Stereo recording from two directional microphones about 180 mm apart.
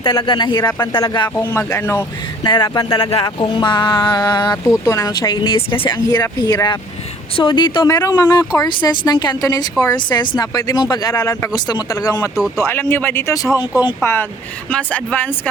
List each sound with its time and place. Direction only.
0.0 s speech: 25° left (ahead or behind)
2.5 s speech: 25° left (ahead or behind); by 15.3 s 10° left (ahead or behind)